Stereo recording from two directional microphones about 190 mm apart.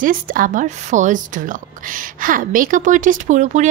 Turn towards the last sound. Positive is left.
turn(degrees=-40)  # may be behind; listen again after turning